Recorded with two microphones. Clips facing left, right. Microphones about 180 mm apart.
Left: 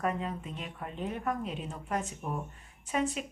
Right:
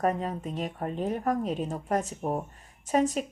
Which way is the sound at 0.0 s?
40° right (ahead or behind).